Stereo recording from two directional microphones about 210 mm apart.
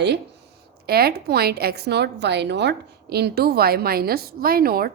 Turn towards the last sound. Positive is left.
turn(degrees=-45)  # may be behind; listen again after turning